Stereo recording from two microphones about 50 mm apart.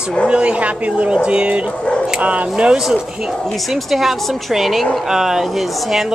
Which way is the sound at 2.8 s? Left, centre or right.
Centre.